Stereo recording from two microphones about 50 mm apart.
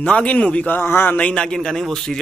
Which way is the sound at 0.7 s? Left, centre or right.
Left.